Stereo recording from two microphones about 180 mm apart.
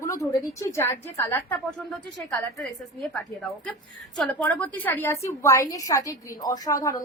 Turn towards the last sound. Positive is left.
turn(degrees=20)  # may be behind; listen again after turning